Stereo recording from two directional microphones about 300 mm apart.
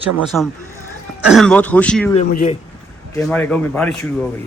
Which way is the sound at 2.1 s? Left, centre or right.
Left.